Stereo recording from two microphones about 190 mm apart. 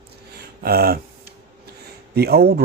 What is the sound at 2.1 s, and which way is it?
Speech, 55° right (ahead or behind).